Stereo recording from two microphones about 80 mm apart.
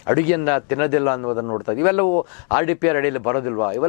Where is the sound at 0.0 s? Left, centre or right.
Centre.